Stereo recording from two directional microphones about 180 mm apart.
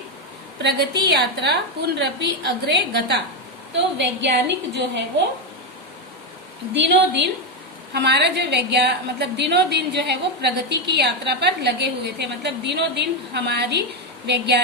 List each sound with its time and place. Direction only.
0.6 s a woman's voice: 65° right (ahead or behind)
6.7 s a woman's voice: 75° right (ahead or behind)